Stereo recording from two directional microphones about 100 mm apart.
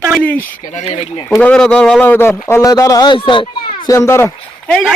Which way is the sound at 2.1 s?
25° left (ahead or behind).